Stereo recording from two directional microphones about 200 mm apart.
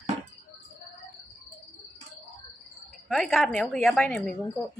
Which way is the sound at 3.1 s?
Centre (ahead or behind).